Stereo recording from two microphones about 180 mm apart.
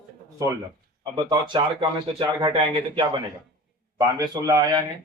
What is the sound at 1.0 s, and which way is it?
Speech, 25° right (ahead or behind).